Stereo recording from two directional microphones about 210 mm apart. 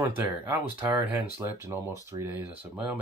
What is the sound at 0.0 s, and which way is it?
Speech, 10° right (ahead or behind).